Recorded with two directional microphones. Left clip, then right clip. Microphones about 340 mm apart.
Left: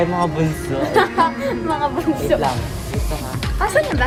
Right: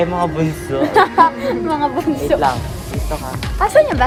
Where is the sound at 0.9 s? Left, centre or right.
Right.